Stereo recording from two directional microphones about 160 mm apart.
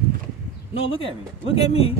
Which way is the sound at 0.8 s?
35° left (ahead or behind).